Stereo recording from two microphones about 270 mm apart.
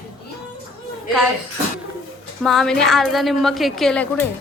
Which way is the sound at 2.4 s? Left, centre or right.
Centre.